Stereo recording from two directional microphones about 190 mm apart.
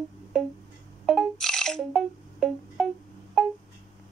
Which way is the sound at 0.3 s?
5° left (ahead or behind).